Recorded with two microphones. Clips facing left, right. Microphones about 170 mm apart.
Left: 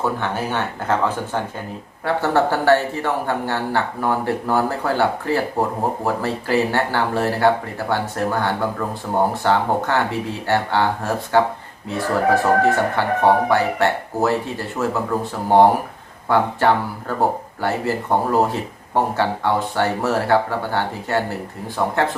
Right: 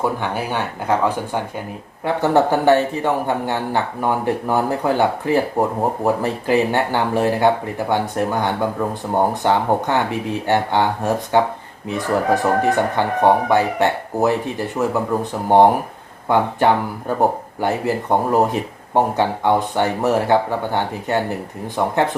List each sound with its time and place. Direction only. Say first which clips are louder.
0.0 s speech: right 1 dB; 10° right (ahead or behind)